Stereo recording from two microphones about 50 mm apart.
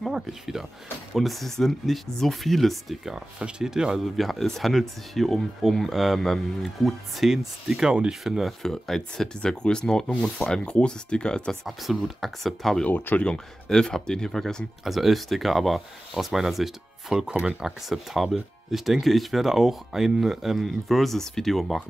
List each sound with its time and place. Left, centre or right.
0.0 s speech: centre
3.3 s speech: centre
4.0 s speech: centre
8.6 s speech: centre
9.4 s speech: centre
11.6 s speech: centre
12.8 s speech: left
13.7 s speech: centre
14.9 s speech: centre